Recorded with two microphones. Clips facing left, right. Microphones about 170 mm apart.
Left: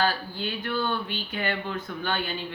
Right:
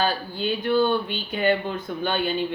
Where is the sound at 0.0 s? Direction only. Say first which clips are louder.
Right 2 dB; 20° right (ahead or behind).